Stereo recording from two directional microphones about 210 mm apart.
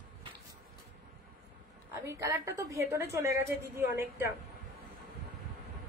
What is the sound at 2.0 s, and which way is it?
A woman's voice, 15° right (ahead or behind).